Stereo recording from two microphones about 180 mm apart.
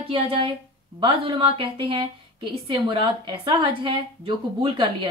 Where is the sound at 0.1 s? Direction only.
30° right (ahead or behind).